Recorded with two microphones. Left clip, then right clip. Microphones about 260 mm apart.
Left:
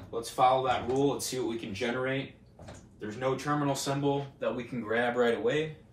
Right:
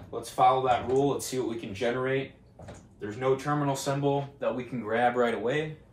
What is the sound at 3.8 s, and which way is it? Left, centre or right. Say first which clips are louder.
Speech: right 2 dB; centre.